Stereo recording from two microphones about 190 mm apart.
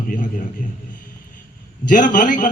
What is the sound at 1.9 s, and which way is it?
Speech, 45° left (ahead or behind).